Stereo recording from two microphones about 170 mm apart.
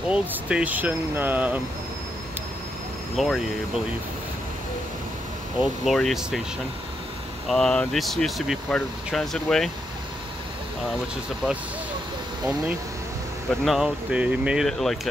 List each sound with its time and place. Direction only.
0.1 s speech: 5° right (ahead or behind)
3.2 s speech: centre (ahead or behind)
5.6 s speech: centre (ahead or behind)
7.4 s speech: 5° left (ahead or behind)
13.5 s speech: centre (ahead or behind)